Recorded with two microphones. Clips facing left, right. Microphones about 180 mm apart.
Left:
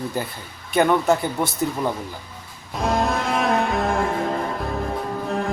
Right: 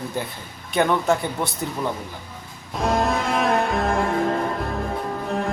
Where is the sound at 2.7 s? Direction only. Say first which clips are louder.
Even; centre (ahead or behind).